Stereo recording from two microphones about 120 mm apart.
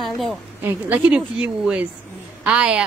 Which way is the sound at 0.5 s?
15° right (ahead or behind).